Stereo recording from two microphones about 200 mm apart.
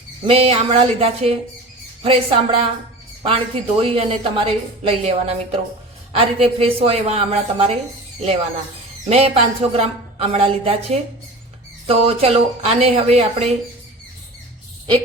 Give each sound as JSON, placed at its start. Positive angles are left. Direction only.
{"t": 0.3, "sound": "a woman's voice", "side_deg": -25}
{"t": 9.0, "sound": "a woman's voice", "side_deg": -30}